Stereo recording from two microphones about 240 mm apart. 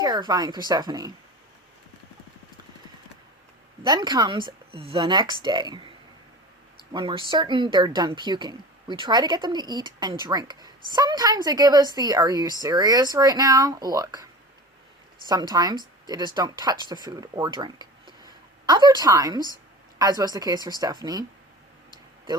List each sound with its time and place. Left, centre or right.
0.0 s speech: centre
3.8 s speech: centre
6.9 s speech: right
15.3 s speech: centre